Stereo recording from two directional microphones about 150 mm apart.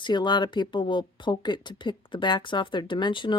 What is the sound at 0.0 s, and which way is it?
A woman's voice, 30° left (ahead or behind).